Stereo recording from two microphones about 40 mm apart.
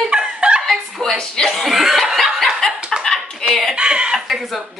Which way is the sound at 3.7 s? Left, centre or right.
Right.